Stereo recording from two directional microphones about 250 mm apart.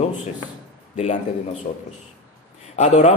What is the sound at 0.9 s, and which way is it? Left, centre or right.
A man's voice, left.